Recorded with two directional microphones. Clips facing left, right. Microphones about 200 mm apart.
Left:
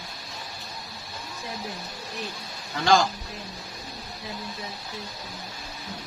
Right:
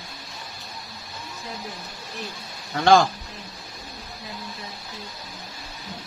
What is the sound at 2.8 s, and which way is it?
Speech, 55° right (ahead or behind).